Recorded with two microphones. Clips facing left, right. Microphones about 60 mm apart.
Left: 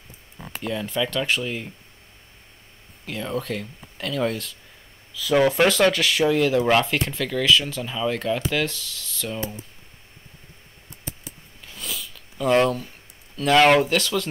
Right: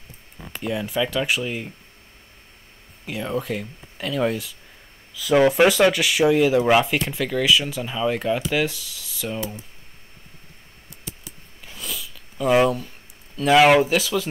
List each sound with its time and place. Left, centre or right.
0.6 s speech: centre
3.1 s speech: centre
11.8 s sniff: centre
13.4 s speech: centre